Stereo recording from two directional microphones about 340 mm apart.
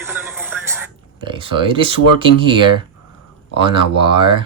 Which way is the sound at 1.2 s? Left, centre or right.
Centre.